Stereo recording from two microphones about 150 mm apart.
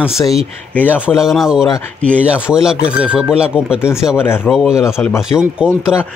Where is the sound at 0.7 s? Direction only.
10° left (ahead or behind).